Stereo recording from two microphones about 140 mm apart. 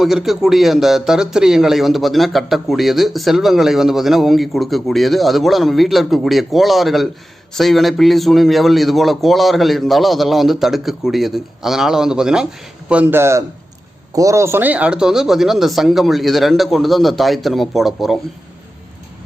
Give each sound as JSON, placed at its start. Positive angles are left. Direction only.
{"t": 0.0, "sound": "a man's voice", "side_deg": -5}